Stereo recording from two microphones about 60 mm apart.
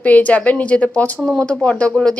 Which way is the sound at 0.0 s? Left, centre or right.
Left.